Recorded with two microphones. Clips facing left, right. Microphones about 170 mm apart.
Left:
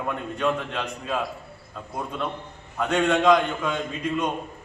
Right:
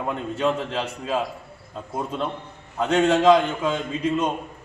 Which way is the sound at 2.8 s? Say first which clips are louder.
Right 3 dB; 30° right (ahead or behind).